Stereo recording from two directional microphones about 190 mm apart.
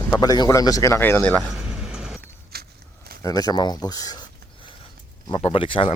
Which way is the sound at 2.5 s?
55° right (ahead or behind).